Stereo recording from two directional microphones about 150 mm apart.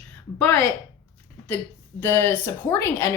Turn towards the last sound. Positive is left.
turn(degrees=20)  # may be behind; listen again after turning